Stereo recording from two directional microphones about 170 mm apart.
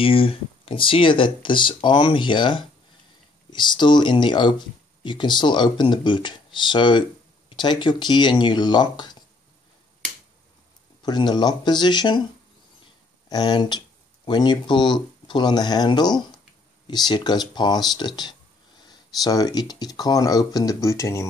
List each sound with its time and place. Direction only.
0.0 s speech: 35° left (ahead or behind)
11.0 s speech: 25° left (ahead or behind)
13.3 s speech: 25° left (ahead or behind)